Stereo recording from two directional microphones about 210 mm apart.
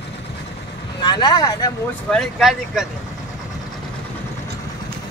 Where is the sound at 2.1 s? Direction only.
Centre (ahead or behind).